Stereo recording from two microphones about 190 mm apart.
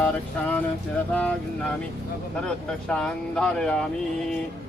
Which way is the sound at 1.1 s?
10° left (ahead or behind).